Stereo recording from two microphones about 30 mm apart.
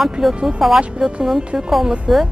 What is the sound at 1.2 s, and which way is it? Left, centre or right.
Speech, centre.